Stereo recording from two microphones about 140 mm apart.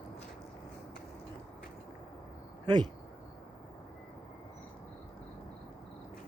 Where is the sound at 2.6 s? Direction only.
30° right (ahead or behind).